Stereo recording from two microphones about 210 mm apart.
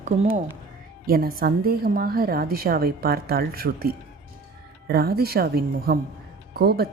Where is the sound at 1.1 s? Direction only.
45° right (ahead or behind).